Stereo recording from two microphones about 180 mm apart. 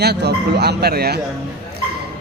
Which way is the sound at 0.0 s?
65° right (ahead or behind).